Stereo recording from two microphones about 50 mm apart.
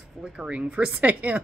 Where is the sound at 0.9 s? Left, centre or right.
Right.